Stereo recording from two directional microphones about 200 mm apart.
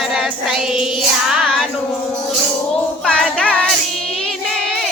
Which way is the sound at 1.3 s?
5° left (ahead or behind).